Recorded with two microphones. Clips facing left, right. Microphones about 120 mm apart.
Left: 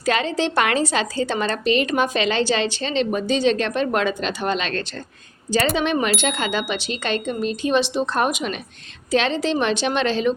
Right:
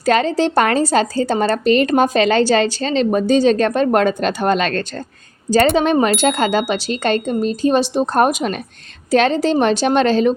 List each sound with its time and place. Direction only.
0.0 s a woman's voice: 40° right (ahead or behind)